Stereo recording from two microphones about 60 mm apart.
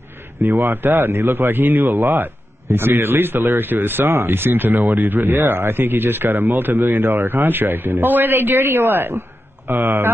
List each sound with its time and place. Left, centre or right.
0.4 s speech: right